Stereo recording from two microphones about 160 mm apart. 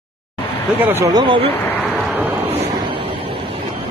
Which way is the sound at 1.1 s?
30° right (ahead or behind).